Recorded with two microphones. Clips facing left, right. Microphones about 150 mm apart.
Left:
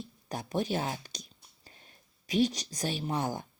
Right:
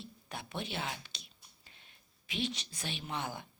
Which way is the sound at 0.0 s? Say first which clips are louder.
Left 6 dB; 40° left (ahead or behind).